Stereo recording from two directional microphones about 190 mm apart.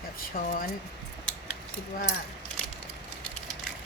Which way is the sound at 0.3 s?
50° left (ahead or behind).